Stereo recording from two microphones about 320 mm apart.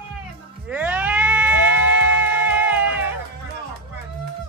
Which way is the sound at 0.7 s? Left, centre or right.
Centre.